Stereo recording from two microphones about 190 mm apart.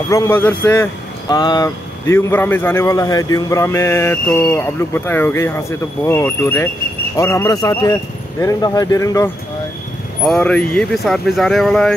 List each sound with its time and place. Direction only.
0.1 s a man's voice: 15° left (ahead or behind)
10.2 s speech: 5° left (ahead or behind)